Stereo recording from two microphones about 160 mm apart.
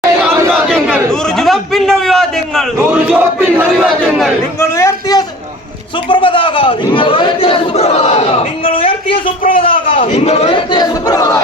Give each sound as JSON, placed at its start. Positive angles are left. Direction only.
{"t": 0.5, "sound": "battle cry", "side_deg": 5}
{"t": 1.4, "sound": "a man's voice", "side_deg": 0}
{"t": 2.9, "sound": "speech", "side_deg": -10}
{"t": 3.8, "sound": "a man's voice", "side_deg": 0}
{"t": 4.8, "sound": "a man's voice", "side_deg": 20}
{"t": 6.1, "sound": "a man's voice", "side_deg": 30}